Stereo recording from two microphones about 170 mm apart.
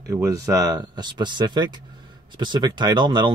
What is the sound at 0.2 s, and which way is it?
Speech, 20° right (ahead or behind).